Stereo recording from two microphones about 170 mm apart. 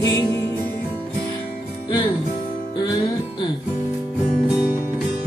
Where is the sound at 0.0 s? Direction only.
20° left (ahead or behind).